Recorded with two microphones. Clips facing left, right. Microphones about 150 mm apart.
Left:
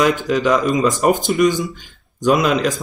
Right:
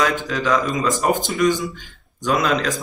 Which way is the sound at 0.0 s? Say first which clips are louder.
Left 5 dB; 15° left (ahead or behind).